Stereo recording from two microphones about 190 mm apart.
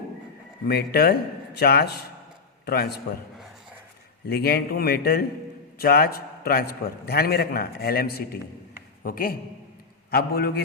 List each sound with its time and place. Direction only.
0.7 s a man's voice: 55° left (ahead or behind)
3.3 s a sound: centre (ahead or behind)
4.3 s a man's voice: 55° left (ahead or behind)